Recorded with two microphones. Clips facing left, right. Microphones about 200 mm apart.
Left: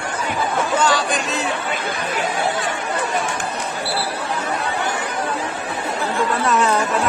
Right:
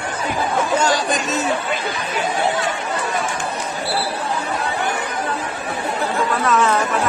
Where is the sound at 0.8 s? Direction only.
45° right (ahead or behind).